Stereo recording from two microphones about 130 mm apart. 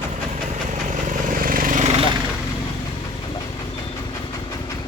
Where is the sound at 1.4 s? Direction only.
90° right.